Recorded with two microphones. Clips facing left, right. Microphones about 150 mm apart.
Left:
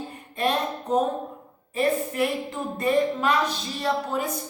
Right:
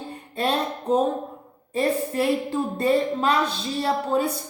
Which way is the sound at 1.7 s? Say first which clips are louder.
Right 1 dB; 35° right (ahead or behind).